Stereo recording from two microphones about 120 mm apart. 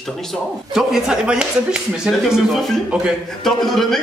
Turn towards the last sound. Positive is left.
turn(degrees=0)  # may be behind; listen again after turning